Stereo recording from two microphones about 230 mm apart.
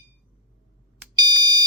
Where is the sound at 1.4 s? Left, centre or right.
Centre.